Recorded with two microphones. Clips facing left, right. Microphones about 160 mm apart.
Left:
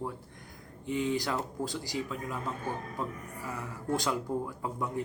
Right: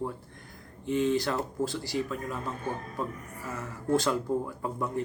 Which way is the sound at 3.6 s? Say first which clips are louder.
Right 6 dB; 15° left (ahead or behind).